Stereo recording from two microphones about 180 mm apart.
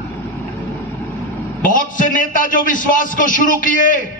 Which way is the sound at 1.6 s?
50° left (ahead or behind).